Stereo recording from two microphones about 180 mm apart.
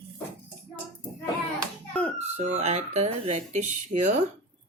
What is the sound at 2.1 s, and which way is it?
Speech, 40° right (ahead or behind).